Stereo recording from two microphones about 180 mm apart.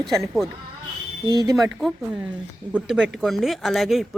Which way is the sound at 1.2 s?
20° right (ahead or behind).